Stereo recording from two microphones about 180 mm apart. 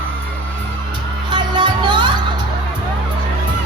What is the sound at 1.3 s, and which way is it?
Music, 25° right (ahead or behind).